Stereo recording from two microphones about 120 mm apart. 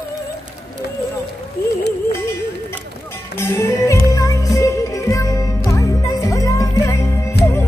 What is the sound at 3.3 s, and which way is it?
Music, 20° left (ahead or behind).